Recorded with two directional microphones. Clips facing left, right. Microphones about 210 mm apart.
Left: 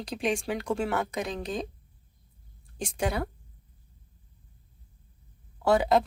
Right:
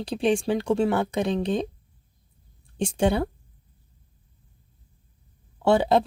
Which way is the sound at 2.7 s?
30° right (ahead or behind).